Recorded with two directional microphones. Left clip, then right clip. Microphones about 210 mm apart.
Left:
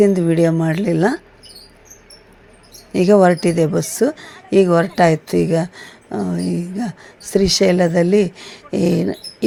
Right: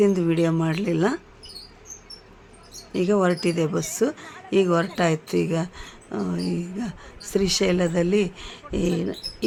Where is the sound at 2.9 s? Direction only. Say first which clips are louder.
Left 9 dB; 25° left (ahead or behind).